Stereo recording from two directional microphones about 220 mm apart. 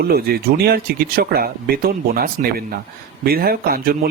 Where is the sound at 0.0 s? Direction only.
45° right (ahead or behind).